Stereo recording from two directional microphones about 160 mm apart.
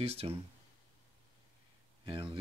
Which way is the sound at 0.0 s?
40° right (ahead or behind).